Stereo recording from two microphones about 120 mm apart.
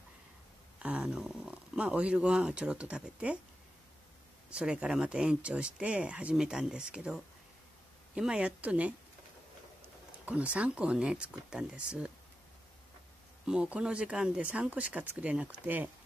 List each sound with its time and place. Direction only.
0.8 s speech: 5° right (ahead or behind)
4.5 s speech: 10° right (ahead or behind)
10.2 s speech: 10° right (ahead or behind)
13.5 s speech: 10° right (ahead or behind)